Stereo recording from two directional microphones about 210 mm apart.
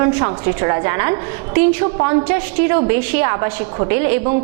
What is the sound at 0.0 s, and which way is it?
A woman's voice, 20° right (ahead or behind).